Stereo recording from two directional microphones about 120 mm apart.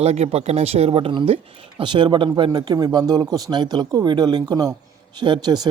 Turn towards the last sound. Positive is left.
turn(degrees=-35)  # may be behind; listen again after turning